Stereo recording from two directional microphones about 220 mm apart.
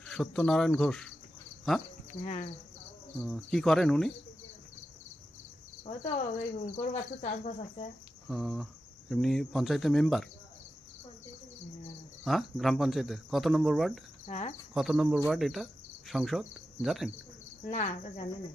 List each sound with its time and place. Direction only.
0.0 s speech: 5° left (ahead or behind)
2.2 s speech: 30° left (ahead or behind)
3.2 s speech: centre (ahead or behind)
5.8 s speech: 30° left (ahead or behind)
8.3 s speech: centre (ahead or behind)
12.2 s speech: centre (ahead or behind)
14.3 s speech: 30° left (ahead or behind)
14.7 s speech: centre (ahead or behind)
15.3 s insect: centre (ahead or behind)
17.7 s speech: 35° left (ahead or behind)